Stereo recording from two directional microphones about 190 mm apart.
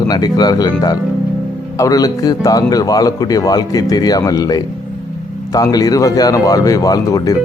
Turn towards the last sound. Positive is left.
turn(degrees=20)  # may be behind; listen again after turning